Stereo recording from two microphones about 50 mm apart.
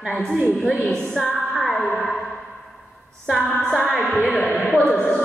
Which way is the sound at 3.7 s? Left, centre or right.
Centre.